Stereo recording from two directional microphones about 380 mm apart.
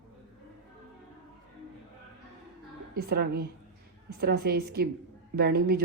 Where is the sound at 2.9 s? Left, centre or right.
Right.